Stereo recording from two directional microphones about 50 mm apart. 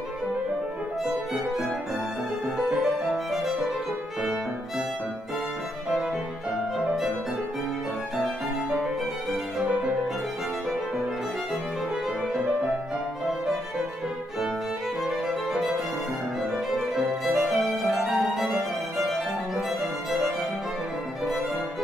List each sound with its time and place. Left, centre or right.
3.3 s music: centre
4.2 s violin: centre
9.6 s violin: right
15.0 s music: centre
17.5 s violin: centre